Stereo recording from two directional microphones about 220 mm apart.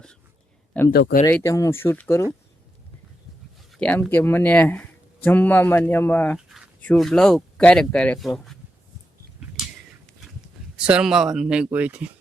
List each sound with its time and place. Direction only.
0.9 s speech: 45° left (ahead or behind)
1.2 s speech: 15° left (ahead or behind)
3.7 s speech: 5° left (ahead or behind)
10.8 s speech: 5° right (ahead or behind)